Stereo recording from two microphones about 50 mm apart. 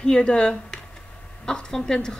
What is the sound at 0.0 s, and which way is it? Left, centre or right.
Speech, centre.